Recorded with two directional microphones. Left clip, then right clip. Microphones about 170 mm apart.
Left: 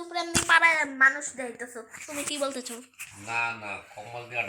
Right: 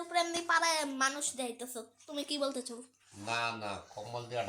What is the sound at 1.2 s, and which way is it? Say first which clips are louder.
Speech: left 3 dB; 35° left (ahead or behind).